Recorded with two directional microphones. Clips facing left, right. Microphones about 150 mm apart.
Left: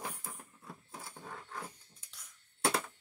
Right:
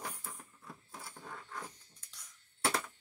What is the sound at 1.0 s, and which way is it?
Roaring cats, 15° left (ahead or behind).